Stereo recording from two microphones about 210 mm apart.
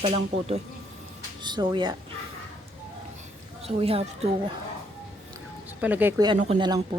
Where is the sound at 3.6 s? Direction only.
30° right (ahead or behind).